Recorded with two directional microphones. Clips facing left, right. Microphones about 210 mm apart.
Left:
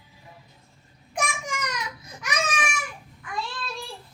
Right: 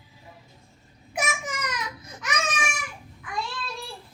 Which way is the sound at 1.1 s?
5° right (ahead or behind).